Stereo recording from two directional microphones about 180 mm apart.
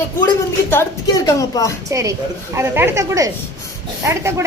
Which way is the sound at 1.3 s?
20° left (ahead or behind).